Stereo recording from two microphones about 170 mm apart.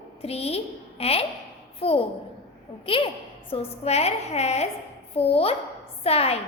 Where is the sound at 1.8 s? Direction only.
35° left (ahead or behind).